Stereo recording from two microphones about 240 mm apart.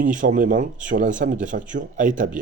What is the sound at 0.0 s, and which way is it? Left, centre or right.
Speech, right.